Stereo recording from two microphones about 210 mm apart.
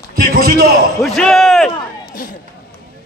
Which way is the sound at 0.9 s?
Centre (ahead or behind).